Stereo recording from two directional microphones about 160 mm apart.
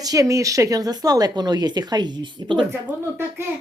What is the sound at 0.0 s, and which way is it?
Speech, 20° right (ahead or behind).